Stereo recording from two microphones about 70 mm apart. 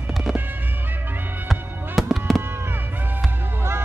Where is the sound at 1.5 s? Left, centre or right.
Centre.